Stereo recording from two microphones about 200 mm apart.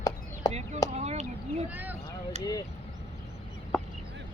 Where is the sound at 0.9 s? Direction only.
35° right (ahead or behind).